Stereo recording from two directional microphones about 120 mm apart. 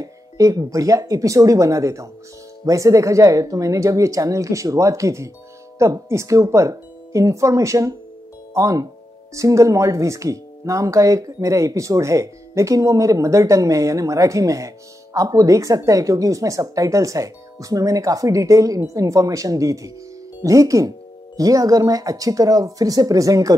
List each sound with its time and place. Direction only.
0.0 s speech: 30° right (ahead or behind)